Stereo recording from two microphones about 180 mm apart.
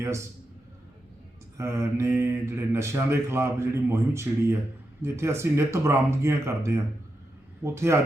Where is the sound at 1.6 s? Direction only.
15° right (ahead or behind).